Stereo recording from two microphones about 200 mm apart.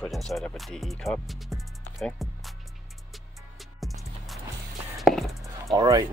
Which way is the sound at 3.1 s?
Centre (ahead or behind).